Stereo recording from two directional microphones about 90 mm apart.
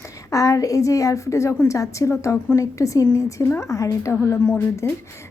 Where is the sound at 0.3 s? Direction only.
40° left (ahead or behind).